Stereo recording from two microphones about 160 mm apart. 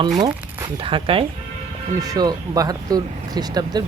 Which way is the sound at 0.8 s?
35° right (ahead or behind).